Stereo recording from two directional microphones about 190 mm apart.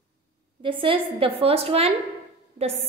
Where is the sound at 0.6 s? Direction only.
30° right (ahead or behind).